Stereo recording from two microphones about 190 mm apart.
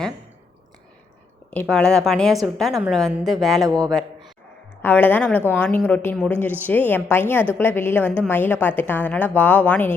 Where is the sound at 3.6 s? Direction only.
20° right (ahead or behind).